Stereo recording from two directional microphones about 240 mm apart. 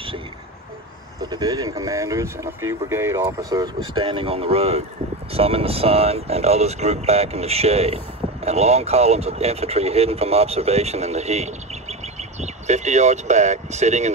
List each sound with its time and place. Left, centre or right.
1.2 s speech: centre